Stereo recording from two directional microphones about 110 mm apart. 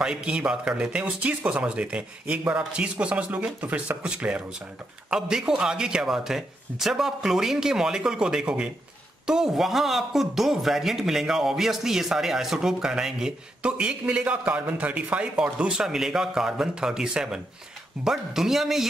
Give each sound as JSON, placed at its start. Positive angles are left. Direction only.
{"t": 0.0, "sound": "speech", "side_deg": -10}